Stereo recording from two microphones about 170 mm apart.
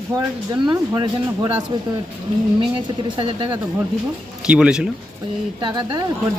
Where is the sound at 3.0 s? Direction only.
30° right (ahead or behind).